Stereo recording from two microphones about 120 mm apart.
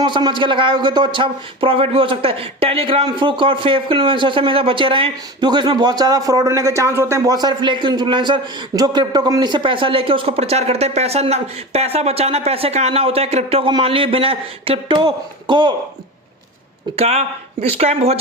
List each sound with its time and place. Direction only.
0.0 s a man's voice: 40° right (ahead or behind); by 7.3 s 20° right (ahead or behind)
7.3 s a man's voice: 40° right (ahead or behind)
17.0 s speech: 60° right (ahead or behind)